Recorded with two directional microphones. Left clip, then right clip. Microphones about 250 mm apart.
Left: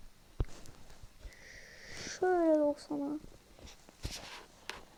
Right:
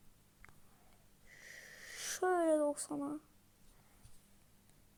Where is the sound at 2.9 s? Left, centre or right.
Right.